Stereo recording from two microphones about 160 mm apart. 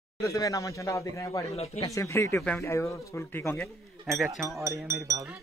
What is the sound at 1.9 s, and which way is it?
Speech, 15° left (ahead or behind).